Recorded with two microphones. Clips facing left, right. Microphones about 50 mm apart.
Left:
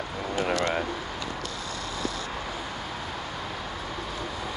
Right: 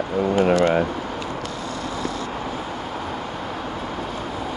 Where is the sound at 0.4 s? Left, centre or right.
Right.